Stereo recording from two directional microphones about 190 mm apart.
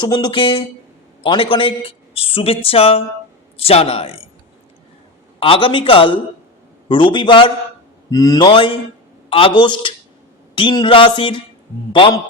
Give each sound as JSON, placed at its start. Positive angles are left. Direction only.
{"t": 0.0, "sound": "speech", "side_deg": 25}
{"t": 5.4, "sound": "speech", "side_deg": 30}